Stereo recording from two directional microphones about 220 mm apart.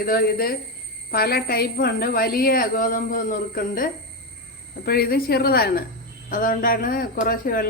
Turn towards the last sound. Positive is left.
turn(degrees=40)  # may be behind; listen again after turning